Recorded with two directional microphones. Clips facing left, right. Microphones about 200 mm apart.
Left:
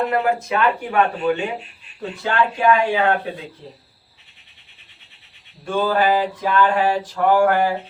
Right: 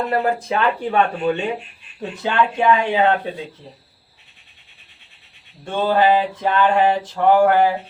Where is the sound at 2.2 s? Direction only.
20° right (ahead or behind).